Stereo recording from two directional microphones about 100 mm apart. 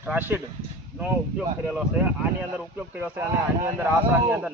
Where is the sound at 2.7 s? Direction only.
15° right (ahead or behind).